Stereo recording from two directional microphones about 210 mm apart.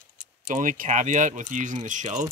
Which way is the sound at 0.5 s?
40° right (ahead or behind).